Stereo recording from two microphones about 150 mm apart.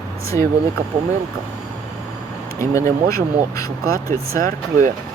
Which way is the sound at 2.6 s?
20° left (ahead or behind).